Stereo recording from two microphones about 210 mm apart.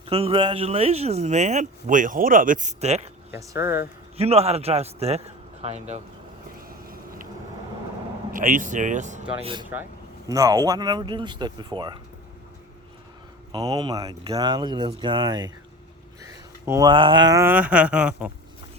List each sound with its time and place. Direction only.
0.0 s speech: 25° right (ahead or behind)
3.3 s speech: 10° right (ahead or behind)
4.2 s speech: 30° right (ahead or behind)
6.7 s vehicle: 45° right (ahead or behind)
8.3 s speech: 40° right (ahead or behind)
9.4 s speech: 25° right (ahead or behind)
13.5 s speech: 20° right (ahead or behind)
16.6 s speech: 15° right (ahead or behind)